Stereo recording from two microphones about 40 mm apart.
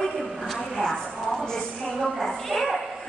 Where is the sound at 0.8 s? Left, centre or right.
Centre.